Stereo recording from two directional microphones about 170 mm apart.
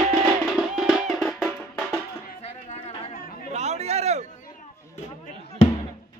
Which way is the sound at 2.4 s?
35° left (ahead or behind).